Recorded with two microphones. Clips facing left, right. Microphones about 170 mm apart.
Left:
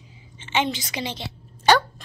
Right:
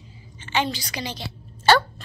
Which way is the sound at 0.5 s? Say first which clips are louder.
Left 1 dB; 20° left (ahead or behind).